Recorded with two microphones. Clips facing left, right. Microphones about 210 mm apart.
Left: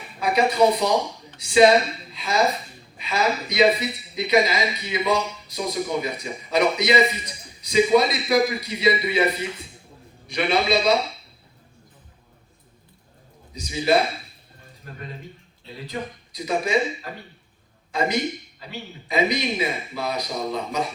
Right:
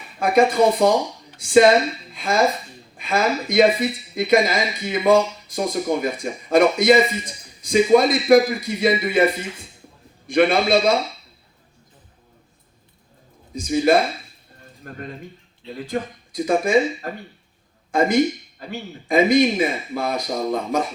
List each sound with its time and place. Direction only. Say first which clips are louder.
0.2 s speech: right 3 dB; 50° right (ahead or behind)
10.2 s speech: right 5 dB; 50° right (ahead or behind)
13.5 s speech: right 4 dB; 50° right (ahead or behind)